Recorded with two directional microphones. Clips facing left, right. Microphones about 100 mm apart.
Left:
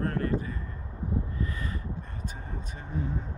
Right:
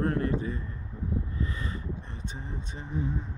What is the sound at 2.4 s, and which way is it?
Mantra, 20° right (ahead or behind).